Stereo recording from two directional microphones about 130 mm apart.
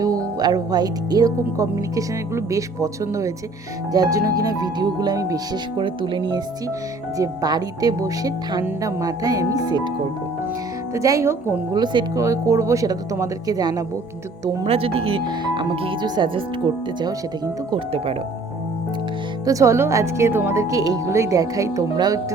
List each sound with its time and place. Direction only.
0.0 s speech: 30° right (ahead or behind)
10.9 s speech: 25° right (ahead or behind)
11.7 s speech: 35° right (ahead or behind)
12.2 s speech: 25° right (ahead or behind)
14.6 s speech: 45° right (ahead or behind)
17.7 s speech: 45° right (ahead or behind)
19.5 s speech: 25° right (ahead or behind)